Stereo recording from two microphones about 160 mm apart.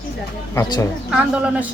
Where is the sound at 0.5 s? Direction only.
20° left (ahead or behind).